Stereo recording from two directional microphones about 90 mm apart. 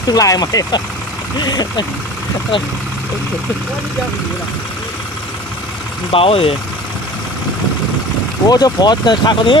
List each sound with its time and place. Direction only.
0.1 s speech: 45° left (ahead or behind)
6.1 s speech: 90° left
8.4 s speech: 45° left (ahead or behind)